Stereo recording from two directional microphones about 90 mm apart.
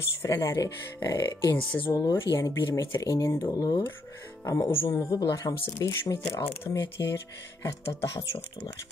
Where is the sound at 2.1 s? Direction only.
30° left (ahead or behind).